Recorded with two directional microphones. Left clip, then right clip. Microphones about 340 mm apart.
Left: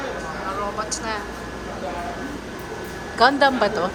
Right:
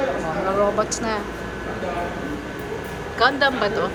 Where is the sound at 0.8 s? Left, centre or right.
Centre.